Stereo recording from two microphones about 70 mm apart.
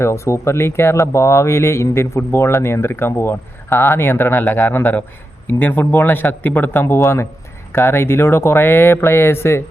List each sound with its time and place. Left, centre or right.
0.0 s speech: left